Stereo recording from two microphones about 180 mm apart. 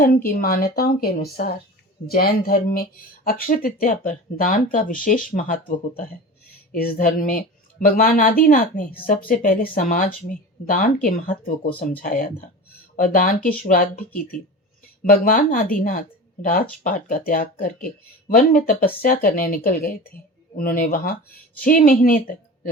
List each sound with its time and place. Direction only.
0.0 s a woman's voice: 50° left (ahead or behind)